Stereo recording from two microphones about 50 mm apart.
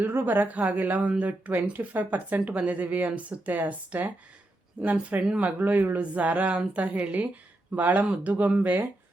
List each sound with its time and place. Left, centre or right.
0.1 s speech: right
6.0 s a sound: right
7.8 s speech: right